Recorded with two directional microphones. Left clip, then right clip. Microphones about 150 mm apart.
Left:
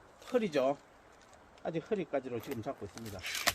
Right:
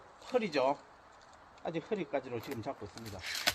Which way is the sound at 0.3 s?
10° left (ahead or behind).